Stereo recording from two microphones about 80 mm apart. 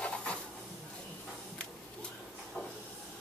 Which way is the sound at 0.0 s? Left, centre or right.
Centre.